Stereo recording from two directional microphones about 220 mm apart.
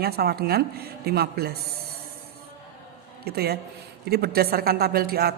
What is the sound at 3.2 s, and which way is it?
A man's voice, 45° right (ahead or behind).